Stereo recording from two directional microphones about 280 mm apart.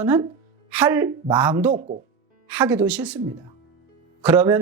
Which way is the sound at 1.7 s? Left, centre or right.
Right.